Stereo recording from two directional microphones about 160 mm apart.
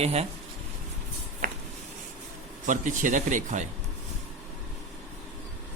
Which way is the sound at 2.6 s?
50° right (ahead or behind).